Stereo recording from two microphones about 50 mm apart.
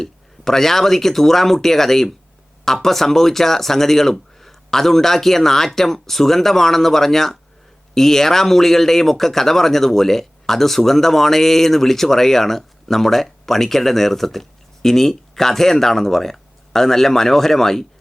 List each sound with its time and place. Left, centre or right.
0.0 s speech: centre